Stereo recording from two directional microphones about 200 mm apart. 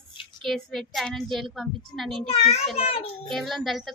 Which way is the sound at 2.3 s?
30° left (ahead or behind).